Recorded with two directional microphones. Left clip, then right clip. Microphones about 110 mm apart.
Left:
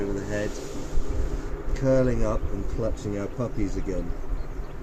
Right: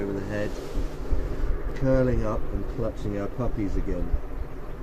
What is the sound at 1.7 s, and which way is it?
Speech, 20° left (ahead or behind).